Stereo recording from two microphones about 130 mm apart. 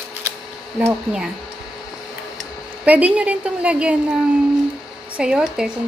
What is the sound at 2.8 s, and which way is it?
A woman's voice, 10° right (ahead or behind).